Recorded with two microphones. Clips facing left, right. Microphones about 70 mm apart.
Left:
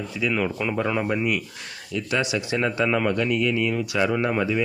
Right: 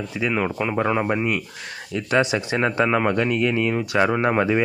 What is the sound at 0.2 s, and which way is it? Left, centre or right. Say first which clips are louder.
Speech: right 2 dB; right.